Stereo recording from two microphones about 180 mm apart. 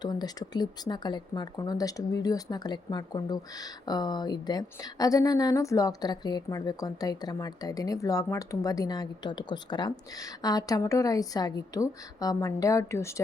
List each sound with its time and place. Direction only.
0.0 s speech: 25° left (ahead or behind)